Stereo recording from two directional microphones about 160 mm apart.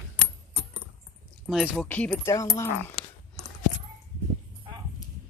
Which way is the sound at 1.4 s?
Centre (ahead or behind).